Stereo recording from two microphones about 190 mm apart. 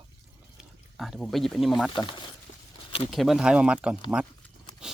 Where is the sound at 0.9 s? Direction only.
Centre (ahead or behind).